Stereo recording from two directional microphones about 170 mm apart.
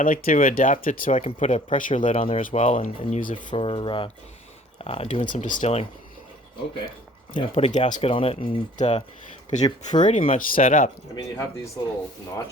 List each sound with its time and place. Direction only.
0.0 s speech: 55° left (ahead or behind)
2.1 s speech: 35° left (ahead or behind); by 3.4 s 50° left (ahead or behind)
3.5 s speech: 30° left (ahead or behind)
5.2 s speech: 50° left (ahead or behind)
7.3 s speech: 35° left (ahead or behind)
8.1 s speech: 30° left (ahead or behind)
8.4 s speech: 45° left (ahead or behind)
9.6 s speech: 25° left (ahead or behind)
10.3 s speech: 50° left (ahead or behind)
11.1 s speech: 15° left (ahead or behind)